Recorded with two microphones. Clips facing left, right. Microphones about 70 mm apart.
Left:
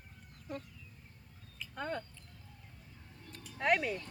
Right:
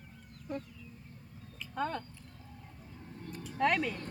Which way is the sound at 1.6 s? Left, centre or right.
Centre.